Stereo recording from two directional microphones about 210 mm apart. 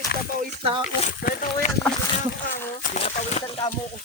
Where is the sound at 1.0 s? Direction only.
40° left (ahead or behind).